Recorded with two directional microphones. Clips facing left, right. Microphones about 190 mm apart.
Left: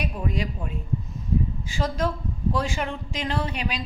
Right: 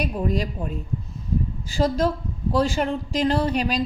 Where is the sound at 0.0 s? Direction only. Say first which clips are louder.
Right 4 dB; 40° right (ahead or behind).